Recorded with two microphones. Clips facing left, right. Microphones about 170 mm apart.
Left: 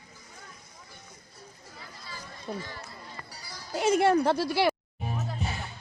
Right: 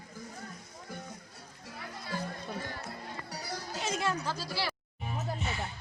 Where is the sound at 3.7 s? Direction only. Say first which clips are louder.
Left 11 dB; 60° left (ahead or behind).